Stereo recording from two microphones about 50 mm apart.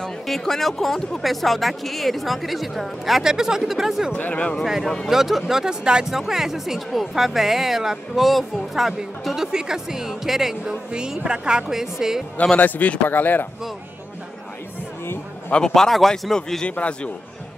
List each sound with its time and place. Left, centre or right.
0.3 s speech: centre
4.1 s a man's voice: left
5.0 s speech: centre
12.5 s speech: left
15.5 s a man's voice: centre
16.6 s a man's voice: left